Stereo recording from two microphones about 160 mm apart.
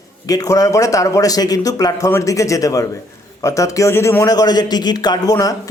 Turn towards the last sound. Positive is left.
turn(degrees=25)  # may be behind; listen again after turning